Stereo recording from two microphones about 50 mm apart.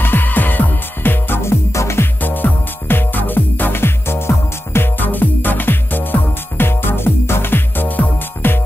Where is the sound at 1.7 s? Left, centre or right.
Left.